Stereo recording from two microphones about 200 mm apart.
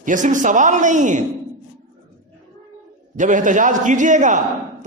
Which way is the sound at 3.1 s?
40° right (ahead or behind).